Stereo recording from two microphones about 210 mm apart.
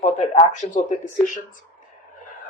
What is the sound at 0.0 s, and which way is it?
Speech, 35° left (ahead or behind).